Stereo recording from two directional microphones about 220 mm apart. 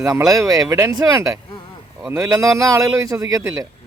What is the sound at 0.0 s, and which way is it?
A man's voice, 10° right (ahead or behind).